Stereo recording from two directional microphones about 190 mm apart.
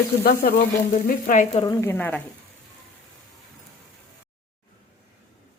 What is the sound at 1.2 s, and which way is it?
Frying, 40° left (ahead or behind).